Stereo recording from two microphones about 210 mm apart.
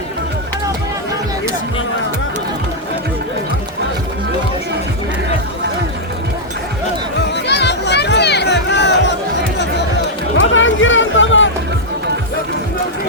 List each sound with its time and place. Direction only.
7.3 s music: 55° left (ahead or behind)
10.5 s music: 65° left (ahead or behind)